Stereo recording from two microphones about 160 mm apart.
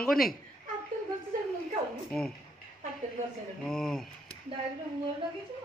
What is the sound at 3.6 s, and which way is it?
Speech, centre (ahead or behind).